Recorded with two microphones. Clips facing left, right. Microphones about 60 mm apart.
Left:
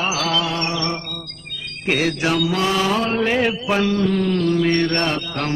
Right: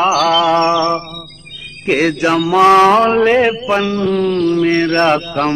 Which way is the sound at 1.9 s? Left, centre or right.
Right.